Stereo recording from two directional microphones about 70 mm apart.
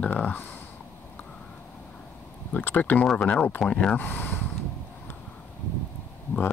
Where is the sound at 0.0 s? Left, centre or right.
Left.